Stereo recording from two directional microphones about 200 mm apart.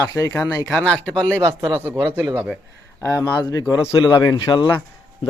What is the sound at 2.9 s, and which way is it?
Speech, 15° left (ahead or behind).